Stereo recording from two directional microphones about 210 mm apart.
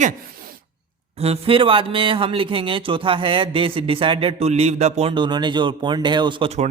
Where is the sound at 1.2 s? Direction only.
25° right (ahead or behind).